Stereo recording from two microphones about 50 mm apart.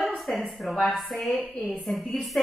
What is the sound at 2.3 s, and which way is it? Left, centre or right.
Music, centre.